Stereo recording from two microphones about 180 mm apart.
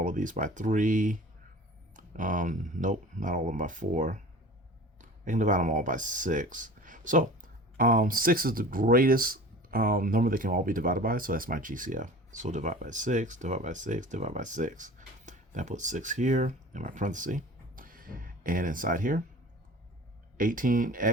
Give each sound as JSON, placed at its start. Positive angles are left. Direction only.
{"t": 0.0, "sound": "speech", "side_deg": -45}
{"t": 20.3, "sound": "speech", "side_deg": -50}